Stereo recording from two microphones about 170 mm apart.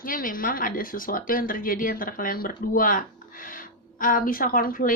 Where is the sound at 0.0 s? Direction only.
55° left (ahead or behind).